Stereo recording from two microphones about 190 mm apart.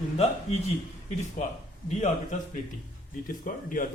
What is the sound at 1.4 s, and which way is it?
Speech, 40° left (ahead or behind).